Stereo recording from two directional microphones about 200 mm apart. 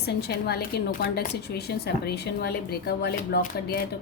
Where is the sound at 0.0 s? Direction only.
55° left (ahead or behind).